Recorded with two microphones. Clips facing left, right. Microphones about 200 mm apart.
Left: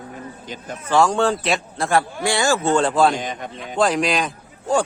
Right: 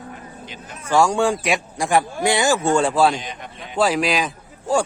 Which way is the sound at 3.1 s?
45° left (ahead or behind).